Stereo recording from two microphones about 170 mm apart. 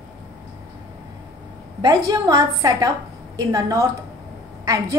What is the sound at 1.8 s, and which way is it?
A woman's voice, 25° right (ahead or behind).